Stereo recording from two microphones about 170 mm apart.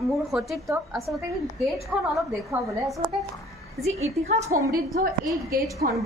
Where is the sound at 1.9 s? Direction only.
5° right (ahead or behind).